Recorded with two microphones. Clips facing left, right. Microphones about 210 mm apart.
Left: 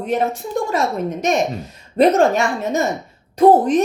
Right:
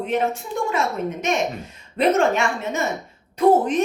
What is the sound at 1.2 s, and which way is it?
A woman's voice, 40° left (ahead or behind).